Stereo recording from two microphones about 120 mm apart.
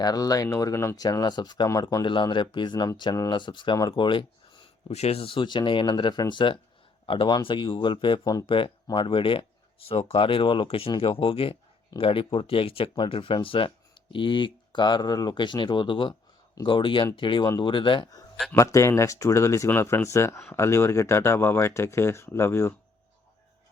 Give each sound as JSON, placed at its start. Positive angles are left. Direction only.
{"t": 0.0, "sound": "speech", "side_deg": 30}
{"t": 1.0, "sound": "speech", "side_deg": 35}
{"t": 2.3, "sound": "speech", "side_deg": 40}
{"t": 4.9, "sound": "speech", "side_deg": 60}
{"t": 18.5, "sound": "speech", "side_deg": 25}